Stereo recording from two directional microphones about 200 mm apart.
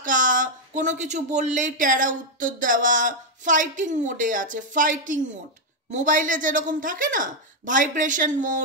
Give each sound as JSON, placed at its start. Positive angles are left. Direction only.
{"t": 0.0, "sound": "speech", "side_deg": -40}